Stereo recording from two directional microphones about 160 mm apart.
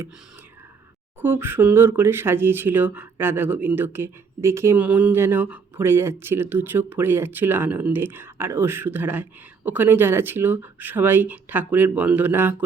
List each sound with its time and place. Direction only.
1.2 s speech: 15° right (ahead or behind)